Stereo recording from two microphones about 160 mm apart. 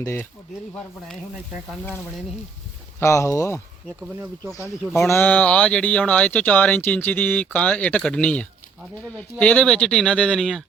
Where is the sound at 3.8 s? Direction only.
15° right (ahead or behind).